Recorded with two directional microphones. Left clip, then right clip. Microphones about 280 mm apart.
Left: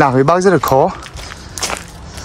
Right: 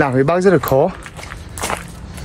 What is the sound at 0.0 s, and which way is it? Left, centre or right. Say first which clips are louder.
Speech: left 3 dB; centre.